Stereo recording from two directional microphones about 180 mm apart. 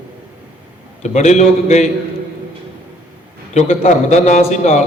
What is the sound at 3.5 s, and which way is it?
A man's voice, 40° left (ahead or behind).